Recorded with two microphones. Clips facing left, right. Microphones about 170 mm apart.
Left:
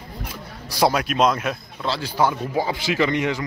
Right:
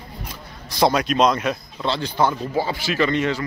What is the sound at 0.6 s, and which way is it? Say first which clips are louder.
Speech: right 1 dB; 10° left (ahead or behind).